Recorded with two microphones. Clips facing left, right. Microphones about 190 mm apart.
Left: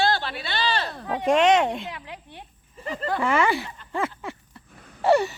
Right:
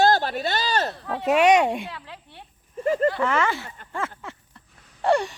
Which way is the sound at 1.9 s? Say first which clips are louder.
Left 2 dB; 15° left (ahead or behind).